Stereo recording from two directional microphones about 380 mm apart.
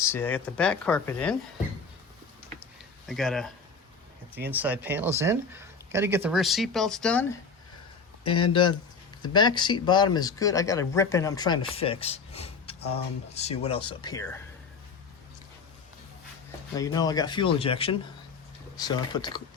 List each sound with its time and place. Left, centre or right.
0.0 s speech: centre
3.1 s speech: centre
4.5 s speech: centre
16.7 s speech: centre